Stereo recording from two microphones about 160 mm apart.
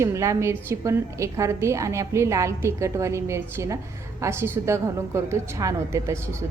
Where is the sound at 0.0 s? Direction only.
20° right (ahead or behind).